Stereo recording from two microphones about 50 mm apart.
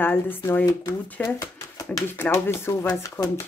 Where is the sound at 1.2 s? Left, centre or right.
Left.